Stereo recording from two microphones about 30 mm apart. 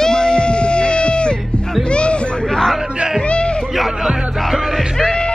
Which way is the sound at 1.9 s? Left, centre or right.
Left.